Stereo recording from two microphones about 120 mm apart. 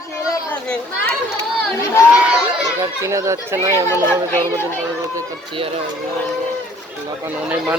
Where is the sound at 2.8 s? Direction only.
25° right (ahead or behind).